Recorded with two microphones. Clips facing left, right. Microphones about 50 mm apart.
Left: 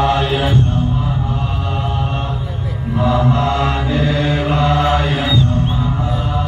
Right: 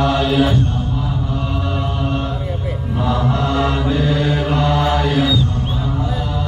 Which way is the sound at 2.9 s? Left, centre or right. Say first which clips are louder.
Left 4 dB; left.